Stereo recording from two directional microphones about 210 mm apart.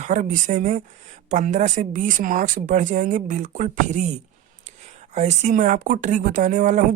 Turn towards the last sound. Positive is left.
turn(degrees=-35)  # may be behind; listen again after turning